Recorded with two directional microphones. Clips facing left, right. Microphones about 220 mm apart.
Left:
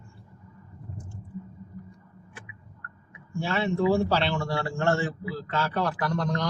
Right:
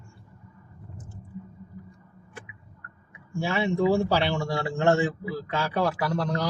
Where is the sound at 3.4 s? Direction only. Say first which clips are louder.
Right 1 dB; 15° right (ahead or behind).